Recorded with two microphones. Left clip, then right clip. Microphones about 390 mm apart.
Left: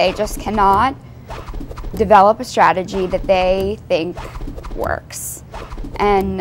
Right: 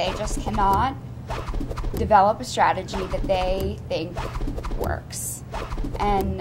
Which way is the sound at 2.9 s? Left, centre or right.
Centre.